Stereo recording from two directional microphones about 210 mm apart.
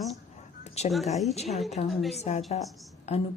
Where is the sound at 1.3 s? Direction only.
30° left (ahead or behind).